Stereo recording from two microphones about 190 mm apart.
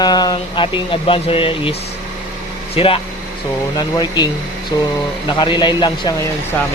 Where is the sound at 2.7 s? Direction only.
30° left (ahead or behind).